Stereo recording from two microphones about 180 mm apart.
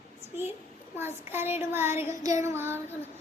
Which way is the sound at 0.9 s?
15° right (ahead or behind).